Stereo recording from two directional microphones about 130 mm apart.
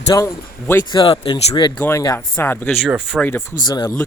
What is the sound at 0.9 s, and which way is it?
Speech, 40° left (ahead or behind).